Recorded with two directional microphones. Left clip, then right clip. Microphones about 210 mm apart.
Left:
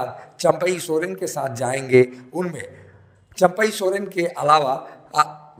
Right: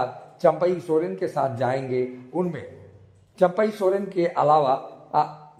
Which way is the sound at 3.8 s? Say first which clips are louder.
Left 1 dB; 5° left (ahead or behind).